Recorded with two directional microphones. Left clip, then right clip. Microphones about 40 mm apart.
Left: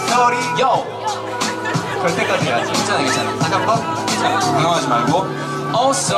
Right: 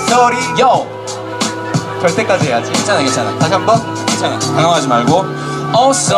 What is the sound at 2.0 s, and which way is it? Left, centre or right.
Music, right.